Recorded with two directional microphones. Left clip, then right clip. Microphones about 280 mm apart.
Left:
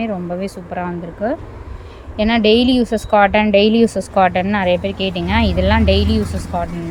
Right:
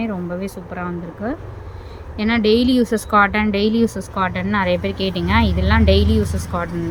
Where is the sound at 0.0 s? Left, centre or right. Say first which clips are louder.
Left 3 dB; centre.